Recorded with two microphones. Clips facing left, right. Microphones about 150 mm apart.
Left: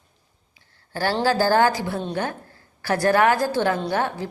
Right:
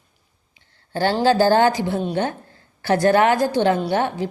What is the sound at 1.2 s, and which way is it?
A woman's voice, 20° right (ahead or behind).